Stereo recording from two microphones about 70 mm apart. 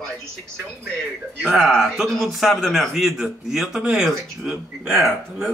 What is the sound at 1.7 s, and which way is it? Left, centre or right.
Speech, centre.